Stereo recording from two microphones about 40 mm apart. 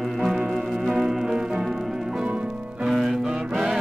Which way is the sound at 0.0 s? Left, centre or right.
Centre.